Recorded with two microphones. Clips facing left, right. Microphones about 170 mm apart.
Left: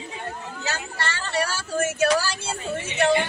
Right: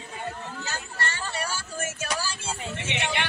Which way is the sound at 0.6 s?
90° left.